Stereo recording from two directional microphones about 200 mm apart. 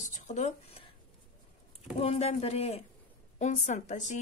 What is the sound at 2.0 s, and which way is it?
Speech, 30° left (ahead or behind).